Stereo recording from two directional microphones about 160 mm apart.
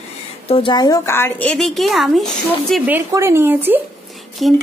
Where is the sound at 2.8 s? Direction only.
15° right (ahead or behind).